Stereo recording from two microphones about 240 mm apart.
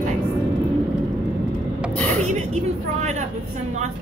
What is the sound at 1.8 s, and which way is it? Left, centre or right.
Vehicle, centre.